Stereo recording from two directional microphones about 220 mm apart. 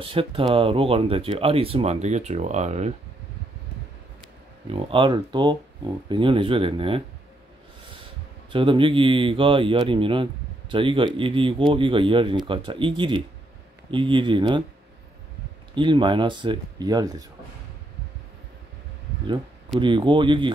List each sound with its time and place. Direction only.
0.0 s speech: 25° right (ahead or behind)
4.6 s speech: 25° right (ahead or behind)
8.5 s speech: 25° right (ahead or behind)
15.7 s speech: 20° right (ahead or behind)
19.8 s speech: 20° right (ahead or behind)